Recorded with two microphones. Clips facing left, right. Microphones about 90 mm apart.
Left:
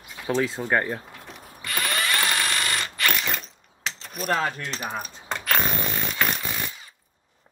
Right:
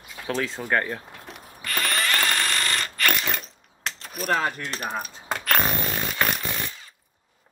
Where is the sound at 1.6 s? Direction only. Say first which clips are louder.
Right 1 dB; 15° left (ahead or behind); by 4.4 s centre (ahead or behind).